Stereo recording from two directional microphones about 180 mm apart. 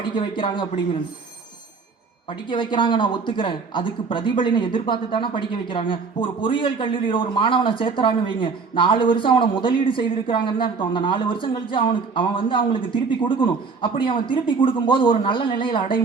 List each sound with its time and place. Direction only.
0.2 s speech: 30° left (ahead or behind)
2.5 s speech: 25° left (ahead or behind)